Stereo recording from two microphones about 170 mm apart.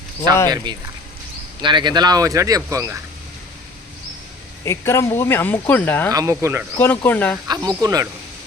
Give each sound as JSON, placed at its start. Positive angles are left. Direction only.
{"t": 0.5, "sound": "speech", "side_deg": -25}
{"t": 4.6, "sound": "speech", "side_deg": 15}
{"t": 6.1, "sound": "speech", "side_deg": -20}
{"t": 6.7, "sound": "speech", "side_deg": 15}
{"t": 7.4, "sound": "speech", "side_deg": -20}